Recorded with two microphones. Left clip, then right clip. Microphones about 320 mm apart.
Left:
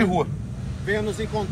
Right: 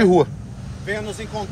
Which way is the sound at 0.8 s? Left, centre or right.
Centre.